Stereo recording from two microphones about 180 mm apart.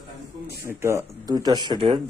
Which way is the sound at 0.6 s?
15° right (ahead or behind).